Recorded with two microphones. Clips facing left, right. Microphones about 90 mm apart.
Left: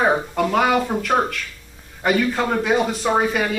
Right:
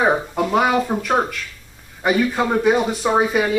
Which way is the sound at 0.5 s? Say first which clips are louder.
Right 1 dB; 15° right (ahead or behind).